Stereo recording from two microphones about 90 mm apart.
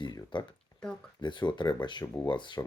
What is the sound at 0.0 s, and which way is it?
Speech, 55° left (ahead or behind).